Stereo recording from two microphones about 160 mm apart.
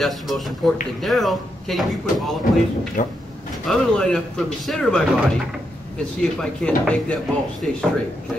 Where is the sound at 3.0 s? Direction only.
50° left (ahead or behind).